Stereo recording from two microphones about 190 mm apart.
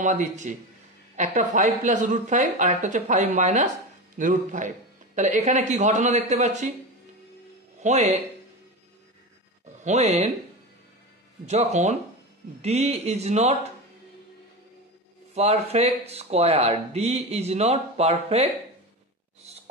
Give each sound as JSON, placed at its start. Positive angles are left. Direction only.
{"t": 0.0, "sound": "speech", "side_deg": -40}
{"t": 7.8, "sound": "speech", "side_deg": -35}
{"t": 9.8, "sound": "speech", "side_deg": -35}
{"t": 11.4, "sound": "speech", "side_deg": -35}
{"t": 15.3, "sound": "speech", "side_deg": -35}